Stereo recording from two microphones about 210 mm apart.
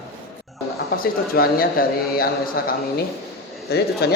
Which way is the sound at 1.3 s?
45° left (ahead or behind).